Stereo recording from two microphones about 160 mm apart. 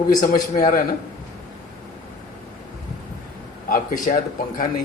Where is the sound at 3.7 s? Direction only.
55° left (ahead or behind).